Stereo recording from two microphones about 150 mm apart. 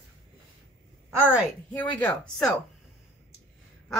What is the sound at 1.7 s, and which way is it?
Speech, 10° left (ahead or behind).